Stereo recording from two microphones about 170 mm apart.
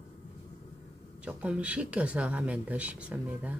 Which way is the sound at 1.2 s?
5° right (ahead or behind).